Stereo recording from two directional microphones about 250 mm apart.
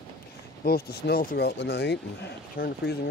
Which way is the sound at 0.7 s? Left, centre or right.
Left.